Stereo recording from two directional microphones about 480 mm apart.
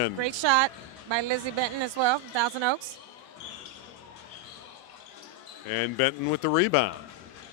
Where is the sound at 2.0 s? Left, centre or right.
Right.